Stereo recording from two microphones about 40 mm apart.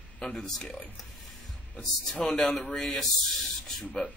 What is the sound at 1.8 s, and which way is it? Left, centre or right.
A man's voice, centre.